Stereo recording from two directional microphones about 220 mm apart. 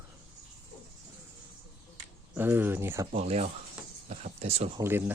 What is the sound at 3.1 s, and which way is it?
Speech, 30° right (ahead or behind).